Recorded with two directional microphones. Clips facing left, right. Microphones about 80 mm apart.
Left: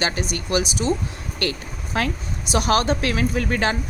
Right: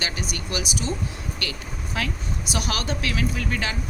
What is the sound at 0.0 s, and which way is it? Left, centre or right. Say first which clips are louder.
Speech: left 6 dB; left.